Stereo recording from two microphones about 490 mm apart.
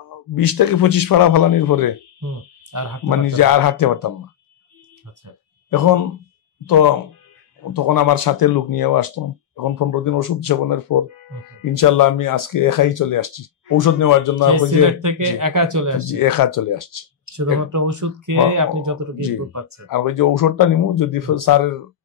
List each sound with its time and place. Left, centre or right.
0.3 s speech: left
2.7 s speech: right
3.1 s speech: left
6.6 s speech: left
14.5 s speech: right
16.1 s speech: left
17.6 s speech: right
19.9 s speech: left